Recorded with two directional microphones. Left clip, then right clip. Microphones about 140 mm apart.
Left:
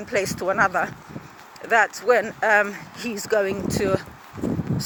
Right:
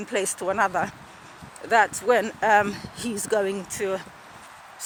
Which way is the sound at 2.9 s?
30° left (ahead or behind).